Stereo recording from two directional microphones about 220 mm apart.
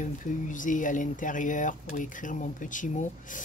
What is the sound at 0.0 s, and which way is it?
Speech, 35° left (ahead or behind).